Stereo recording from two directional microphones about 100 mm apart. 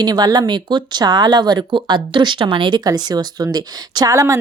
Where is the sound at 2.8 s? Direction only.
40° right (ahead or behind).